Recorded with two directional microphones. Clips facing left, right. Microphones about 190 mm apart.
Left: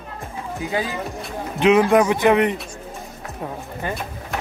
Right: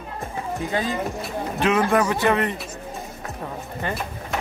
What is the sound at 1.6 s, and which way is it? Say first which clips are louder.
Speech: left 5 dB; 15° left (ahead or behind).